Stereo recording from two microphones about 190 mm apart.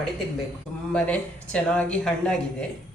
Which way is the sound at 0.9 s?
5° left (ahead or behind).